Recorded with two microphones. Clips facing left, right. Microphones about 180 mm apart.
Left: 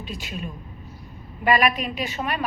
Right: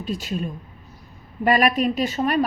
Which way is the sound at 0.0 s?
40° right (ahead or behind).